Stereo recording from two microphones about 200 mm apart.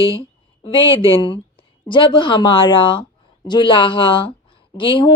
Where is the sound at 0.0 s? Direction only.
25° left (ahead or behind).